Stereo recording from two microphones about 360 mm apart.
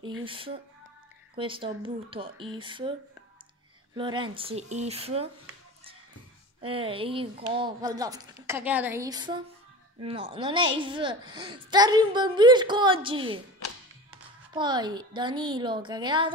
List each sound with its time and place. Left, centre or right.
0.2 s speech: centre
3.9 s speech: centre
6.6 s speech: centre
14.5 s speech: centre